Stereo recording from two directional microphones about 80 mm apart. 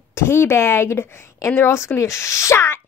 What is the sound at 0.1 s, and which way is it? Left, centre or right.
A woman's voice, left.